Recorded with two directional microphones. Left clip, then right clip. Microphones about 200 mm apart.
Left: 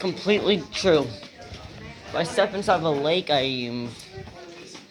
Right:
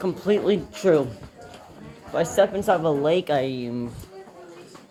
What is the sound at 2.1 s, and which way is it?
Speech, 25° right (ahead or behind).